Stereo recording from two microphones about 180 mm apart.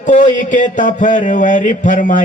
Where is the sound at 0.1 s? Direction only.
45° left (ahead or behind).